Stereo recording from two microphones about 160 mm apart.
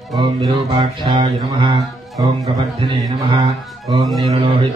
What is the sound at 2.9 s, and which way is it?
Speech, 30° right (ahead or behind).